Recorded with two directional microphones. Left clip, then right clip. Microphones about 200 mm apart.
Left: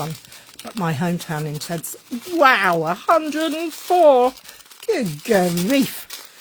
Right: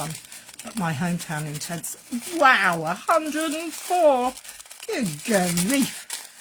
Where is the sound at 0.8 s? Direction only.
50° left (ahead or behind).